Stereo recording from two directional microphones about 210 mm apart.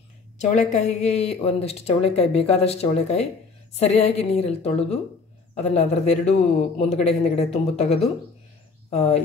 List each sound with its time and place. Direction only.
0.4 s speech: 35° left (ahead or behind)